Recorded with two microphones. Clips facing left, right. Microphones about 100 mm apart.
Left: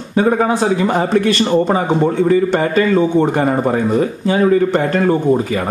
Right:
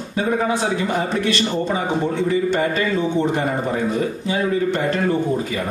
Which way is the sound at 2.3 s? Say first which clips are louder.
Left 5 dB; 50° left (ahead or behind).